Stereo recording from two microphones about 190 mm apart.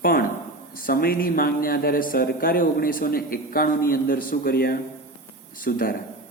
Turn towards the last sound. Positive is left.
turn(degrees=50)  # may be behind; listen again after turning